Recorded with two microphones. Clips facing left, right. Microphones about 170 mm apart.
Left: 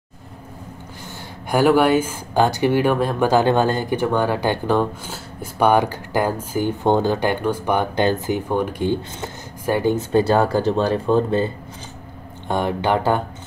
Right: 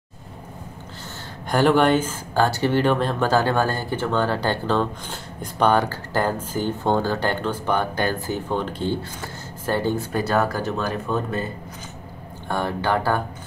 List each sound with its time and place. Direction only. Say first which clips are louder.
1.5 s speech: left 2 dB; 10° left (ahead or behind)
10.1 s speech: left 7 dB; 30° left (ahead or behind)